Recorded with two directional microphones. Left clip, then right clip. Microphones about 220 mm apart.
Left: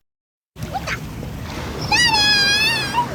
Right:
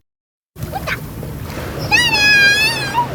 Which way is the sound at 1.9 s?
5° right (ahead or behind).